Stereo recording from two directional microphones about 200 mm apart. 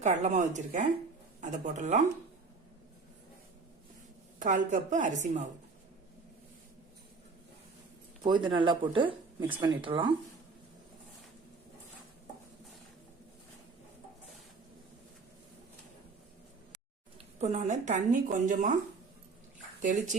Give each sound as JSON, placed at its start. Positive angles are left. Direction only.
{"t": 0.0, "sound": "speech", "side_deg": -35}
{"t": 4.4, "sound": "speech", "side_deg": -40}
{"t": 8.2, "sound": "speech", "side_deg": -25}
{"t": 17.2, "sound": "speech", "side_deg": -35}
{"t": 19.8, "sound": "speech", "side_deg": -40}